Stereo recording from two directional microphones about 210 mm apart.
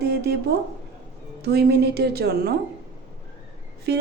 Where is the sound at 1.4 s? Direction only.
50° right (ahead or behind).